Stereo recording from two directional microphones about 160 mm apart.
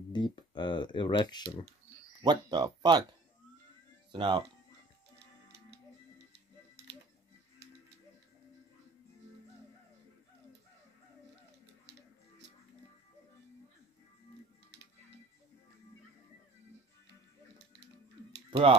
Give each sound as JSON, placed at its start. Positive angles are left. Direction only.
{"t": 0.1, "sound": "speech", "side_deg": 30}
{"t": 2.2, "sound": "speech", "side_deg": -25}
{"t": 18.5, "sound": "speech", "side_deg": -40}